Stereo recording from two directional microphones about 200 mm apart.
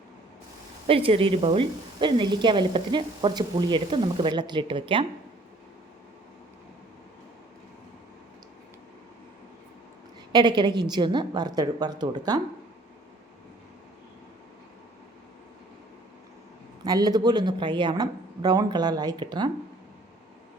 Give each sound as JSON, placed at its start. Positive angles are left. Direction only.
{"t": 0.9, "sound": "a woman's voice", "side_deg": -30}
{"t": 10.3, "sound": "a woman's voice", "side_deg": -20}
{"t": 16.8, "sound": "a woman's voice", "side_deg": -20}